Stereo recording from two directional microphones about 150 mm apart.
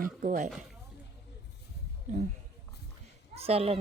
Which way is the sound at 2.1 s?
55° right (ahead or behind).